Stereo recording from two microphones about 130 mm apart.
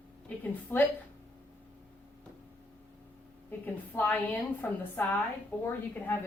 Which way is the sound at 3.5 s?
15° left (ahead or behind).